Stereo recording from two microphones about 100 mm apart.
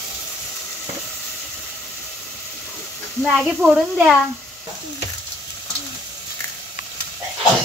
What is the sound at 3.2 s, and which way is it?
Speech, 10° right (ahead or behind).